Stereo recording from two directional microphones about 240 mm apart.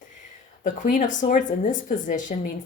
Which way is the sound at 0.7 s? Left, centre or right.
Left.